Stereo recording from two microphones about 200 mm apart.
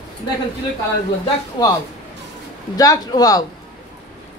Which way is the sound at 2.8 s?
20° left (ahead or behind).